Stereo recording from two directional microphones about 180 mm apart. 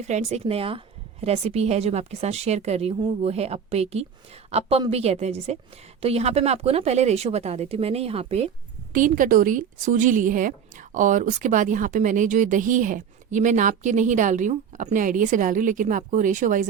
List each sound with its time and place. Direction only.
0.1 s a woman's voice: 40° right (ahead or behind)
8.9 s a woman's voice: 50° right (ahead or behind)